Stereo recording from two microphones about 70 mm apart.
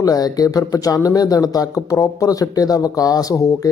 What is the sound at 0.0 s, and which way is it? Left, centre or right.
Speech, left.